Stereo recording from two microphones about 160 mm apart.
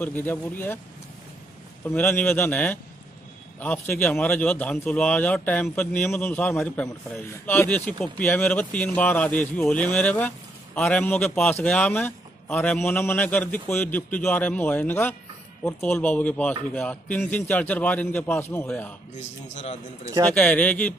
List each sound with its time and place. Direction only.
0.0 s a man's voice: 10° left (ahead or behind)
1.9 s a man's voice: 10° left (ahead or behind)
19.5 s a man's voice: 45° left (ahead or behind)
20.3 s a man's voice: 10° left (ahead or behind)